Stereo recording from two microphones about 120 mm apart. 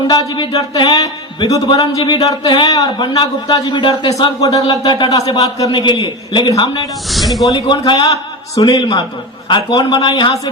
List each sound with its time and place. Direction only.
0.1 s speech: 35° left (ahead or behind)
1.6 s speech: 40° left (ahead or behind)
4.2 s speech: 30° left (ahead or behind)
7.1 s speech: centre (ahead or behind)
7.4 s speech: 30° left (ahead or behind)